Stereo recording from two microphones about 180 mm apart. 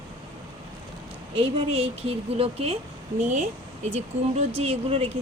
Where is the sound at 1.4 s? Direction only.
30° right (ahead or behind).